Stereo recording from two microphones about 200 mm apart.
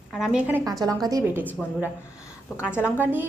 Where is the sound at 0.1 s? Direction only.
Centre (ahead or behind).